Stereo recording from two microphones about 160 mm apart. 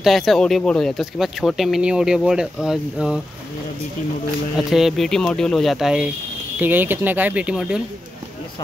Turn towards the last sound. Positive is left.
turn(degrees=-5)  # may be behind; listen again after turning